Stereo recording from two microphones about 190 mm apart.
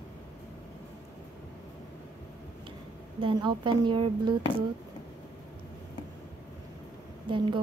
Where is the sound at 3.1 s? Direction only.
25° right (ahead or behind).